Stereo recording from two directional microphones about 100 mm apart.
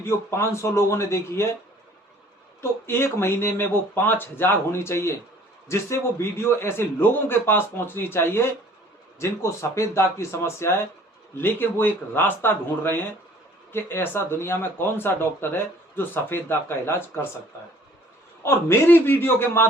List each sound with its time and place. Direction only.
0.0 s speech: 30° left (ahead or behind)
2.6 s speech: 25° left (ahead or behind)
18.4 s speech: 25° left (ahead or behind)